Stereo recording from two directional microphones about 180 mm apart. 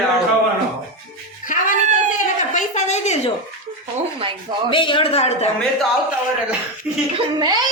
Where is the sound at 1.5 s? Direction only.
45° left (ahead or behind).